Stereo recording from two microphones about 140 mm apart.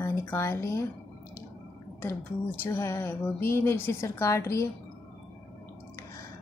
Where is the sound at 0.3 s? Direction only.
15° left (ahead or behind).